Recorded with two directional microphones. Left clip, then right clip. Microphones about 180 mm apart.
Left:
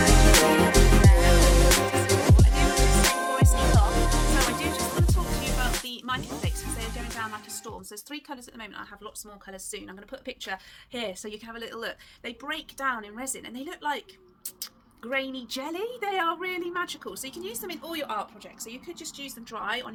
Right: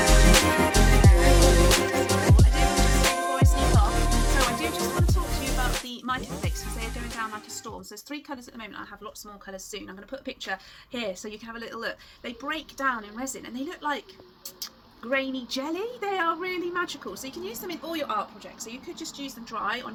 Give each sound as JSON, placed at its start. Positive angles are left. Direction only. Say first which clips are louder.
{"t": 0.0, "sound": "music", "louder": "left 1 dB", "side_deg": 0}
{"t": 5.8, "sound": "music", "louder": "right 1 dB", "side_deg": 20}
{"t": 8.1, "sound": "speech", "louder": "right 2 dB", "side_deg": 20}